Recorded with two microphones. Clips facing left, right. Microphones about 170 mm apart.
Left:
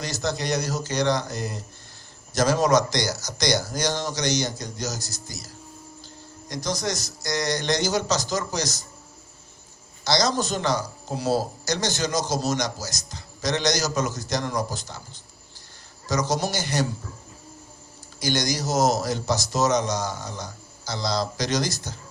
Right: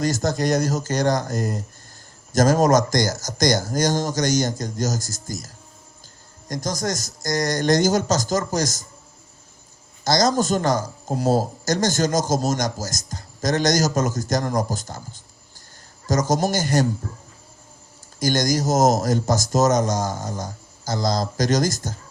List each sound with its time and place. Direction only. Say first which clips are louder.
0.0 s speech: right 6 dB; 45° right (ahead or behind)
6.5 s speech: right 2 dB; 45° right (ahead or behind)
10.0 s speech: right 4 dB; 45° right (ahead or behind)
18.2 s speech: right 5 dB; 45° right (ahead or behind)